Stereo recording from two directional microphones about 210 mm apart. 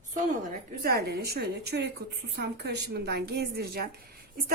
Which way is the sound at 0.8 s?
45° right (ahead or behind).